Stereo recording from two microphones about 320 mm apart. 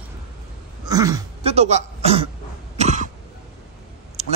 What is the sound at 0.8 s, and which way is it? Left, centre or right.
Speech, centre.